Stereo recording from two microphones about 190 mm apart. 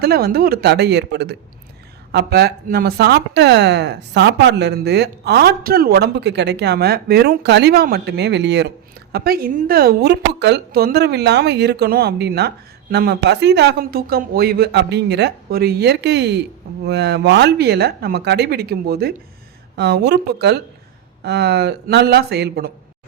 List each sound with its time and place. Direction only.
0.0 s speech: 55° right (ahead or behind)
9.1 s speech: 50° right (ahead or behind)